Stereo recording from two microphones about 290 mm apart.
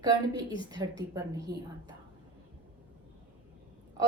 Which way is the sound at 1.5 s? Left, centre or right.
Right.